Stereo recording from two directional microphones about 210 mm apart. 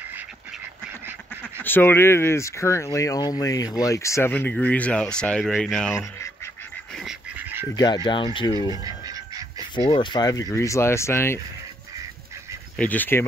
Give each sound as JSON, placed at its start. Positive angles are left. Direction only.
{"t": 1.6, "sound": "speech", "side_deg": 10}
{"t": 5.9, "sound": "duck", "side_deg": 15}
{"t": 7.0, "sound": "duck", "side_deg": -5}
{"t": 7.7, "sound": "speech", "side_deg": 20}
{"t": 9.0, "sound": "duck", "side_deg": -15}
{"t": 9.8, "sound": "speech", "side_deg": 25}
{"t": 12.7, "sound": "speech", "side_deg": 10}